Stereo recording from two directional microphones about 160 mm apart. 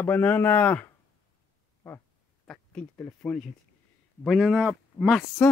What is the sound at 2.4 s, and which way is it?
Speech, 5° left (ahead or behind).